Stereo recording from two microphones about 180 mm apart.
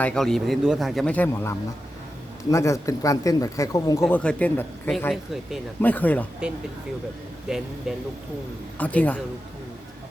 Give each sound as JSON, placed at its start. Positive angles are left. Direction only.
{"t": 0.0, "sound": "speech", "side_deg": 5}
{"t": 4.1, "sound": "speech", "side_deg": 5}
{"t": 7.4, "sound": "speech", "side_deg": -5}
{"t": 8.8, "sound": "speech", "side_deg": 10}